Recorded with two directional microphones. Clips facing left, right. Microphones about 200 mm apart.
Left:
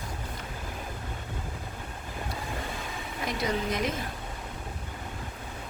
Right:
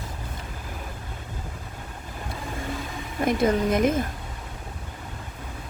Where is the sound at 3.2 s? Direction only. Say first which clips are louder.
Right 9 dB; 50° right (ahead or behind).